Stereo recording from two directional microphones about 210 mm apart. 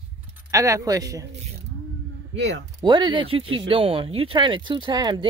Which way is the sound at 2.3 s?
60° right (ahead or behind).